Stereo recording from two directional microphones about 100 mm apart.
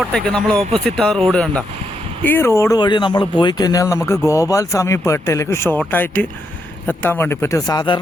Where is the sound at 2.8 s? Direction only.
50° left (ahead or behind); by 7.6 s 25° left (ahead or behind).